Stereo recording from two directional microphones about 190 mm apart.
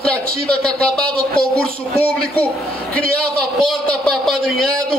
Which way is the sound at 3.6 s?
Centre (ahead or behind).